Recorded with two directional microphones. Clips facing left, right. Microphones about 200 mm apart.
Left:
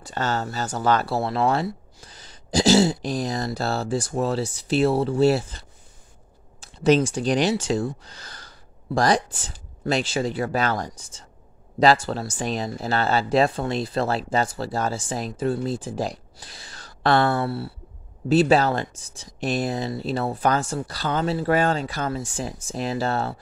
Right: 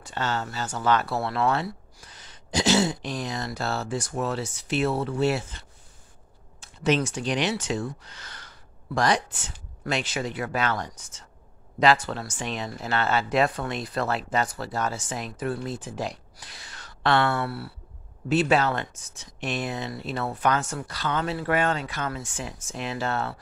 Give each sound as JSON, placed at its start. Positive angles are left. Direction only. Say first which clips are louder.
{"t": 0.0, "sound": "speech", "louder": "left 3 dB", "side_deg": 40}